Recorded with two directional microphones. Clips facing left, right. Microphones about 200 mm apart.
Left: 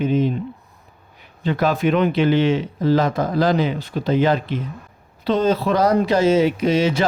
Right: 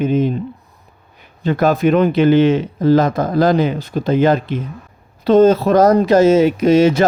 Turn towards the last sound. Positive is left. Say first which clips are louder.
# right 7 dB
turn(degrees=-45)  # may be behind; listen again after turning